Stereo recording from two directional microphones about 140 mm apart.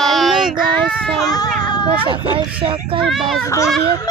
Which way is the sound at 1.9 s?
40° right (ahead or behind).